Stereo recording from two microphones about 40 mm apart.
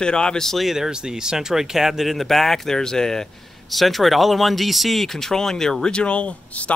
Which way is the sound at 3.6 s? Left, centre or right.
Centre.